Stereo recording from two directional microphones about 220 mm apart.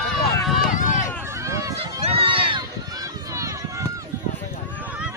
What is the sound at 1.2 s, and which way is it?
Run, 15° right (ahead or behind).